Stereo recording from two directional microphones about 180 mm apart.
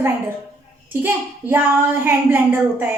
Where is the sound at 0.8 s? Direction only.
10° right (ahead or behind).